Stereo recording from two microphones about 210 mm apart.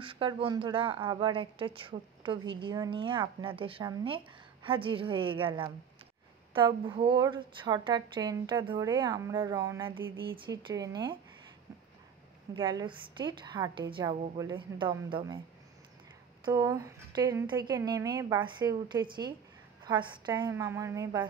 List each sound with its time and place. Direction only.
0.0 s a woman's voice: 25° right (ahead or behind)
12.5 s a woman's voice: 20° right (ahead or behind)
16.4 s a woman's voice: 15° right (ahead or behind)